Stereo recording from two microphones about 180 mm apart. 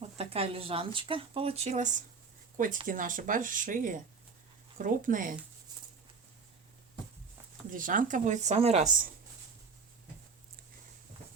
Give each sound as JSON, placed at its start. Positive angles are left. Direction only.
{"t": 0.0, "sound": "speech", "side_deg": -35}
{"t": 7.7, "sound": "speech", "side_deg": -50}